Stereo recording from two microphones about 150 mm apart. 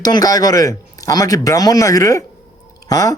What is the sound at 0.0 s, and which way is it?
A man's voice, 25° left (ahead or behind).